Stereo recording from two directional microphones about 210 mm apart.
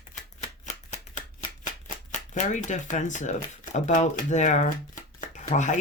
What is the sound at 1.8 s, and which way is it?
Speech, 35° left (ahead or behind).